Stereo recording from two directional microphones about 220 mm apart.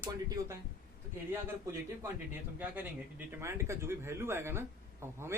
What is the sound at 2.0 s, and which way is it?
Speech, 10° right (ahead or behind).